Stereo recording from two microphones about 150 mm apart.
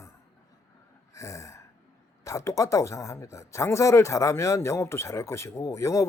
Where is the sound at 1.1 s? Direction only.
20° left (ahead or behind).